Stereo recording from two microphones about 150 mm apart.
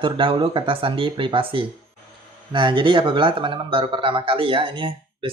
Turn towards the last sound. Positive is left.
turn(degrees=-35)  # may be behind; listen again after turning